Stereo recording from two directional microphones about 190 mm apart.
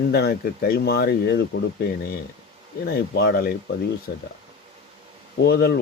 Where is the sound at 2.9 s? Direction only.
60° left (ahead or behind).